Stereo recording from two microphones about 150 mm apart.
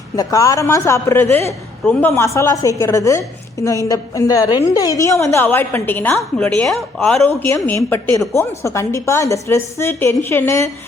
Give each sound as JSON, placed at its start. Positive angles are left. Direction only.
{"t": 0.2, "sound": "a woman's voice", "side_deg": 20}